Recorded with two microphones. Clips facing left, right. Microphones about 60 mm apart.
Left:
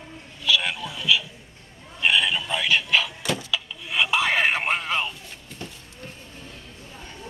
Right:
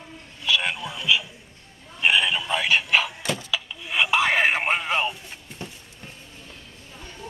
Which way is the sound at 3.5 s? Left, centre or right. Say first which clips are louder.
Even; centre.